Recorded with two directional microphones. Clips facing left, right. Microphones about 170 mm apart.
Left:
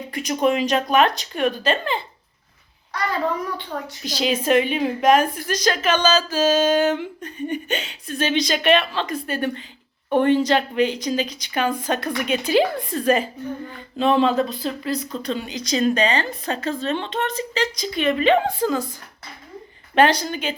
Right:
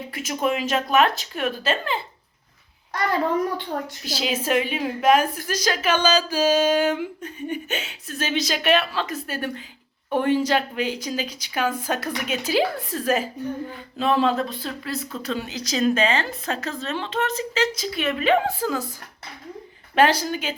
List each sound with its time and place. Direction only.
0.1 s a woman's voice: 5° right (ahead or behind)
4.0 s a woman's voice: 5° right (ahead or behind)
20.0 s a woman's voice: 5° right (ahead or behind)